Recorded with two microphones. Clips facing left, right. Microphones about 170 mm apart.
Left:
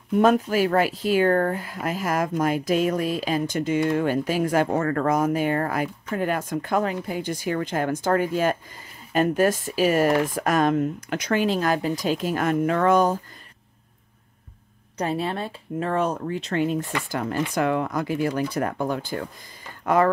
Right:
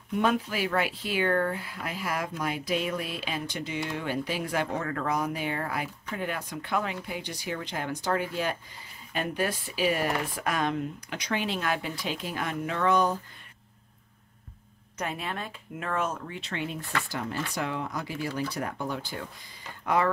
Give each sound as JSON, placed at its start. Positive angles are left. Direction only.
{"t": 0.2, "sound": "speech", "side_deg": 45}
{"t": 15.0, "sound": "speech", "side_deg": 35}